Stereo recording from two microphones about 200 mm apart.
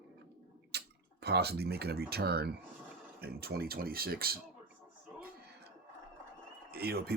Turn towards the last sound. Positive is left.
turn(degrees=-50)  # may be behind; listen again after turning